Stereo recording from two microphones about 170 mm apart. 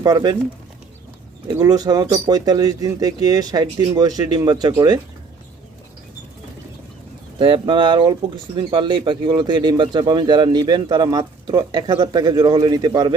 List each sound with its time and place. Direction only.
0.0 s speech: 20° right (ahead or behind)
1.5 s speech: 20° right (ahead or behind)
7.3 s speech: 30° right (ahead or behind)